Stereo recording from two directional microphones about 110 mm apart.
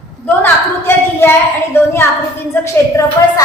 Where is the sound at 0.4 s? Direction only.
20° left (ahead or behind).